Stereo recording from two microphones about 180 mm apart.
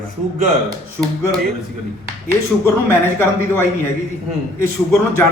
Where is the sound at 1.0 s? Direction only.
5° left (ahead or behind).